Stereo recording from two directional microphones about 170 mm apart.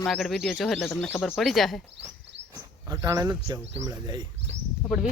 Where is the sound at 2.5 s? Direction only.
20° right (ahead or behind).